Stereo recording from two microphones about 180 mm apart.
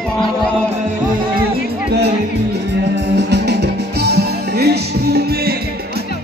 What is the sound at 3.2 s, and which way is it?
Music, 70° right (ahead or behind).